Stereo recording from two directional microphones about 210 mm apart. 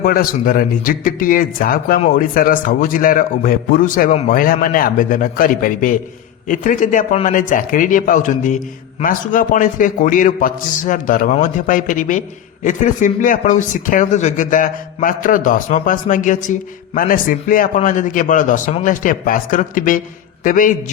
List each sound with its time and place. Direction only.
0.0 s speech: 45° left (ahead or behind)